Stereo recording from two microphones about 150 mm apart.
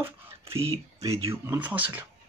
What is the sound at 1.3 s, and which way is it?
Speech, 15° right (ahead or behind).